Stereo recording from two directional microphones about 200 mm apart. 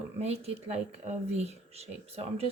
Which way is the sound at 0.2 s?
30° right (ahead or behind).